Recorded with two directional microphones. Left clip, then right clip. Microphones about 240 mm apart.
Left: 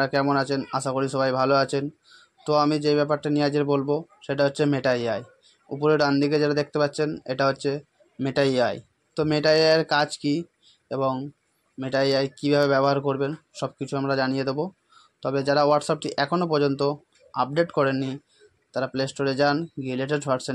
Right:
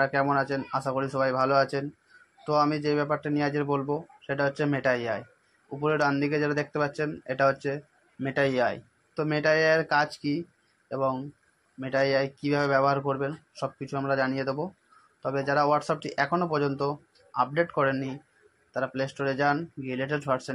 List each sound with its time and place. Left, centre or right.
0.0 s a man's voice: left